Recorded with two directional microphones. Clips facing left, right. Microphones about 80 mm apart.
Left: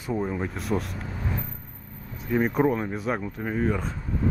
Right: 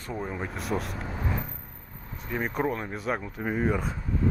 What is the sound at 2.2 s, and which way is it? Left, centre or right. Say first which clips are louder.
Speech: left 6 dB; centre.